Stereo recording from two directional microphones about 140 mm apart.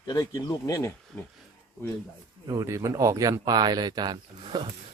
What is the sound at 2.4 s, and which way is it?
Speech, 25° right (ahead or behind).